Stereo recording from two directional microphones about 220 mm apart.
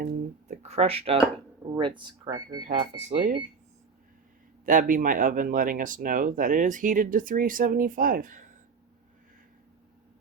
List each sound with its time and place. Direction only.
0.0 s a sound: 30° right (ahead or behind)
1.7 s speech: 20° right (ahead or behind)
3.1 s speech: 35° right (ahead or behind)
4.6 s speech: 35° right (ahead or behind)